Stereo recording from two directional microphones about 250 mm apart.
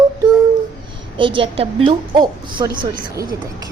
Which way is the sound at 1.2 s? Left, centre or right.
Centre.